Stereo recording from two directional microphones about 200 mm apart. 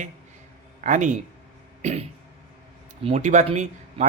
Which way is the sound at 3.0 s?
35° right (ahead or behind).